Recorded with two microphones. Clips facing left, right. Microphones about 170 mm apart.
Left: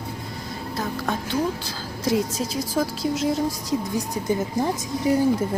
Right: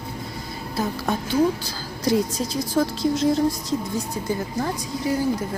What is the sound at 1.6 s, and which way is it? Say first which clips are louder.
A woman's voice: right 1 dB; centre (ahead or behind).